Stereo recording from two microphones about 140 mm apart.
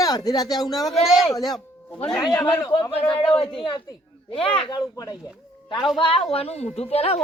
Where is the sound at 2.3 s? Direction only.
15° left (ahead or behind).